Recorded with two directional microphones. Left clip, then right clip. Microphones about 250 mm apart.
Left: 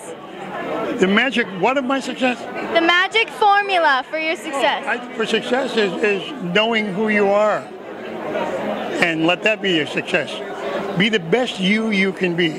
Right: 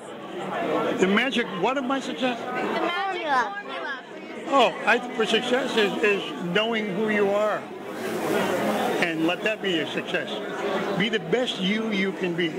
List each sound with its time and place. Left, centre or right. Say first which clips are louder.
0.9 s a man's voice: left 9 dB; left
2.7 s a woman's voice: left 14 dB; left
5.2 s a man's voice: left 4 dB; left
9.0 s a man's voice: left 7 dB; left